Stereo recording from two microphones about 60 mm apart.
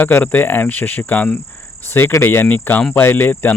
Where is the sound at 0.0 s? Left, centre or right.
Left.